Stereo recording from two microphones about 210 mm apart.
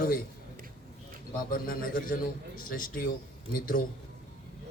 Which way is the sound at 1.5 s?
45° left (ahead or behind).